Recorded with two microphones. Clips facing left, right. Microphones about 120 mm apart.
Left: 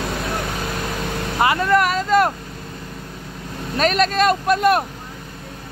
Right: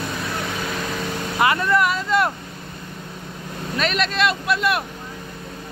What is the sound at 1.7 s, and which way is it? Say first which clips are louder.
Speech: left 3 dB; 45° left (ahead or behind).